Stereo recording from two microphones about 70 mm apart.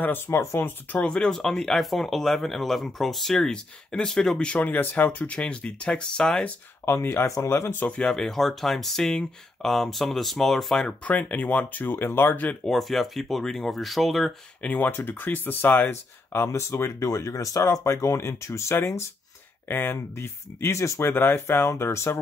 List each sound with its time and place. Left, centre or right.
0.0 s speech: left
0.9 s speech: centre
6.9 s speech: left
7.8 s speech: centre
10.9 s speech: left
11.9 s speech: left
12.4 s speech: centre
14.6 s speech: left
19.7 s speech: left
21.1 s speech: left